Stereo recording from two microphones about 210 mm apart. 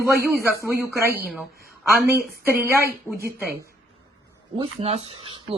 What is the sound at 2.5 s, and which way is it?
Speech, 10° right (ahead or behind).